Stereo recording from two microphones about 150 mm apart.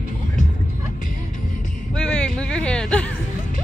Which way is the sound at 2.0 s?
5° left (ahead or behind).